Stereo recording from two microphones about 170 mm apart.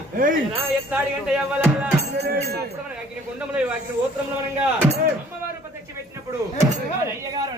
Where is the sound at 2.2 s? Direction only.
70° right (ahead or behind).